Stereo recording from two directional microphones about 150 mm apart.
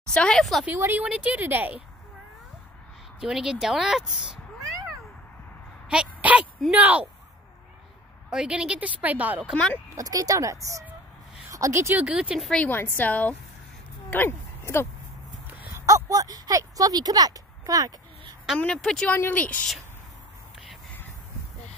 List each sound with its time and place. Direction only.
0.1 s a woman's voice: 5° left (ahead or behind)
0.7 s a woman's voice: 10° right (ahead or behind)
3.2 s a woman's voice: 5° right (ahead or behind)
5.9 s a sound: 5° right (ahead or behind)
6.7 s a woman's voice: 10° right (ahead or behind)
8.3 s a woman's voice: 5° right (ahead or behind)
9.5 s speech: 5° left (ahead or behind)
9.9 s a woman's voice: 25° right (ahead or behind); by 14.9 s 15° left (ahead or behind)
15.7 s speech: 20° right (ahead or behind)
18.6 s a woman's voice: 5° left (ahead or behind)